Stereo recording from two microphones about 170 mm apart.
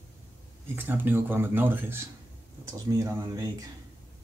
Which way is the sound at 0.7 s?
10° right (ahead or behind).